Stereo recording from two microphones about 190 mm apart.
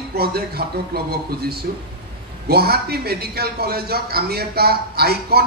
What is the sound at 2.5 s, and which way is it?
Speech, 55° right (ahead or behind).